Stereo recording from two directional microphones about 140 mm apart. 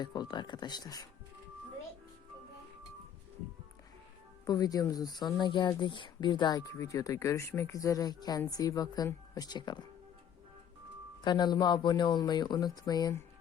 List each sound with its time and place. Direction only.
0.0 s speech: 30° left (ahead or behind)
4.4 s speech: 25° left (ahead or behind)
11.2 s speech: 30° left (ahead or behind)